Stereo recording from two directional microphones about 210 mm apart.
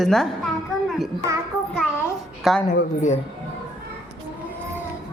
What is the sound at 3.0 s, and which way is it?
Speech, 35° left (ahead or behind).